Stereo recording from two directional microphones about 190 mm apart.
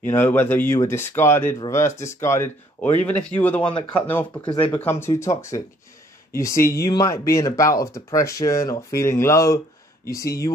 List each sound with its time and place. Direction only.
0.0 s speech: 10° left (ahead or behind)